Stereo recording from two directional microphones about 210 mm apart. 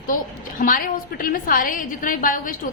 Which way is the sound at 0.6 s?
40° left (ahead or behind).